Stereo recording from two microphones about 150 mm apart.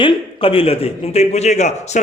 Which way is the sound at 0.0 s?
35° left (ahead or behind).